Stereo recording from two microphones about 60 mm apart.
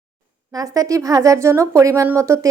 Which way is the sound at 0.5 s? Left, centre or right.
Right.